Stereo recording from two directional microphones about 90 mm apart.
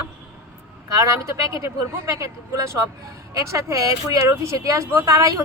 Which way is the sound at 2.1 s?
35° right (ahead or behind).